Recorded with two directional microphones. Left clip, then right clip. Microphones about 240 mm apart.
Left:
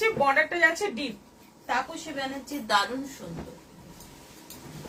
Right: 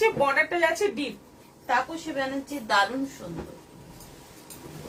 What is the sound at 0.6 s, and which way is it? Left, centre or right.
Speech, centre.